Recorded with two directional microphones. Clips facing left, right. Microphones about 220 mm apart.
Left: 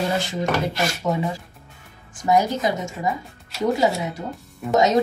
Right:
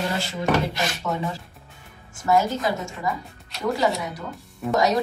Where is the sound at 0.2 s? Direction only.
20° left (ahead or behind).